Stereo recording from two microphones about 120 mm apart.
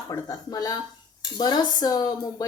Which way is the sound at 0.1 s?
30° left (ahead or behind).